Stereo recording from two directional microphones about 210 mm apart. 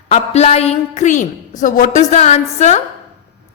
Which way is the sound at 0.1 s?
30° left (ahead or behind).